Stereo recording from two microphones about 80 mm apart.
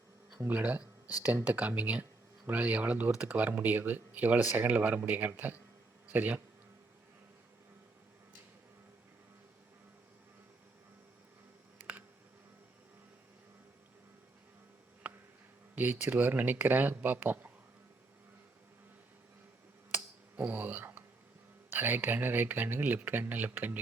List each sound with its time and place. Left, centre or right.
0.4 s speech: centre
15.7 s speech: right
19.9 s a sound: centre
21.7 s speech: right